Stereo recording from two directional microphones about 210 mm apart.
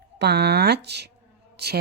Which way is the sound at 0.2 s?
50° right (ahead or behind).